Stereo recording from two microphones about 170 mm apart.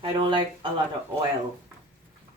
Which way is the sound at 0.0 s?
30° right (ahead or behind).